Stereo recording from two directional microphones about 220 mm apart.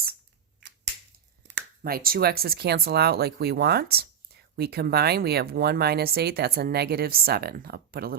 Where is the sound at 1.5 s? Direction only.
50° right (ahead or behind).